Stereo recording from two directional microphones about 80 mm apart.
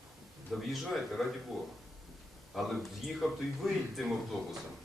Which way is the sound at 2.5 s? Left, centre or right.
Centre.